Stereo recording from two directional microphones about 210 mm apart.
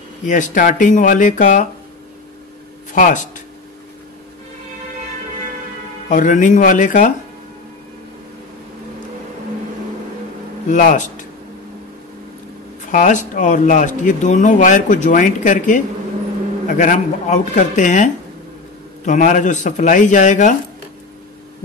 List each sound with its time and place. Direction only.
0.3 s speech: 35° left (ahead or behind)
2.9 s speech: 35° left (ahead or behind)
6.0 s speech: 35° left (ahead or behind)
10.7 s speech: 35° left (ahead or behind)
12.9 s speech: 35° left (ahead or behind)